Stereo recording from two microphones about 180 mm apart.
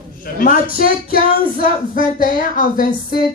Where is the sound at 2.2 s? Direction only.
50° left (ahead or behind).